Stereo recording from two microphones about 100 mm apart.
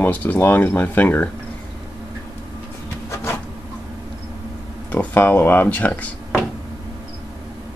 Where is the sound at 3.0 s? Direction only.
25° left (ahead or behind).